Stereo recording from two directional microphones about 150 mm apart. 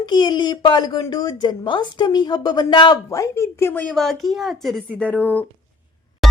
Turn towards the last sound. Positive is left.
turn(degrees=0)  # may be behind; listen again after turning